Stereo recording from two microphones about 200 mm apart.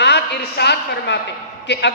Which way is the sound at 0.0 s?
55° left (ahead or behind).